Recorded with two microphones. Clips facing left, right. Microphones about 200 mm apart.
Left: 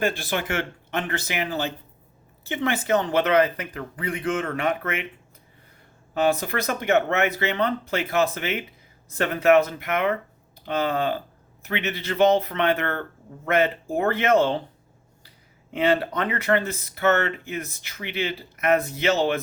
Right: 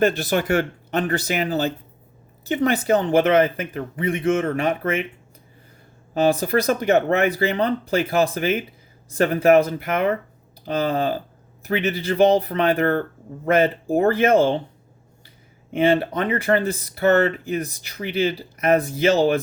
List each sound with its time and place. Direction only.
0.0 s speech: 45° right (ahead or behind)
6.2 s speech: 35° right (ahead or behind)
15.7 s speech: 25° right (ahead or behind)